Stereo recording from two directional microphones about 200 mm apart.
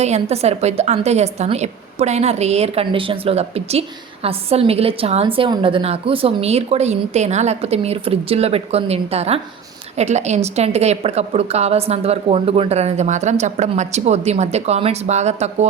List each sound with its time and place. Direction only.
0.0 s a woman's voice: 35° right (ahead or behind)